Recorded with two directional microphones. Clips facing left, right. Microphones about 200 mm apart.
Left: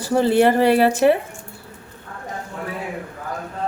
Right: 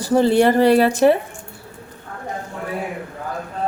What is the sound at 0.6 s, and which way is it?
Speech, 40° right (ahead or behind).